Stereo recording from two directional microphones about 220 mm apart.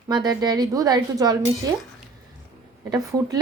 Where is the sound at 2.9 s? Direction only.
15° right (ahead or behind).